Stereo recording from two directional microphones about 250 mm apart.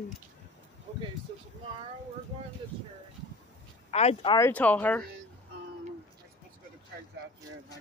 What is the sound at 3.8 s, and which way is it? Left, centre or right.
Speech, left.